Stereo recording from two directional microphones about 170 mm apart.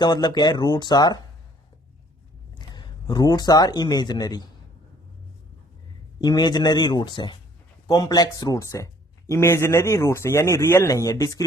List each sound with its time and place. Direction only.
0.0 s speech: 25° left (ahead or behind)
2.6 s speech: 25° left (ahead or behind)
6.1 s a man's voice: 25° left (ahead or behind)